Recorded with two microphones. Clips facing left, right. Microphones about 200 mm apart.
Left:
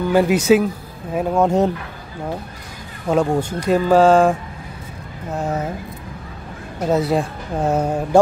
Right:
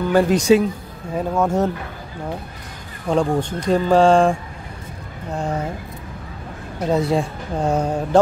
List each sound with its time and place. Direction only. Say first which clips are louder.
0.1 s speech: even; 5° left (ahead or behind)
1.1 s speech: left 3 dB; 15° left (ahead or behind)
3.1 s speech: left 1 dB; 5° left (ahead or behind)
6.9 s speech: left 1 dB; centre (ahead or behind)